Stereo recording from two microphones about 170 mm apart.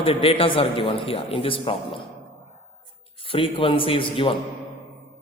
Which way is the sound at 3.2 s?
30° left (ahead or behind).